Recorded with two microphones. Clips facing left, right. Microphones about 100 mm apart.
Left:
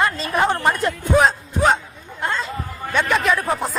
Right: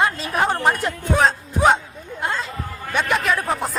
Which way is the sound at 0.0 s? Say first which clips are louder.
Left 1 dB; 10° right (ahead or behind).